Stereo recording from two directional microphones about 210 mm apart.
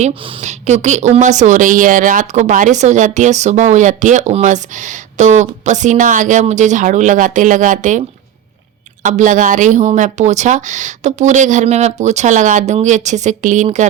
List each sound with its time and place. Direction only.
0.0 s speech: 35° right (ahead or behind)
9.0 s speech: 35° right (ahead or behind)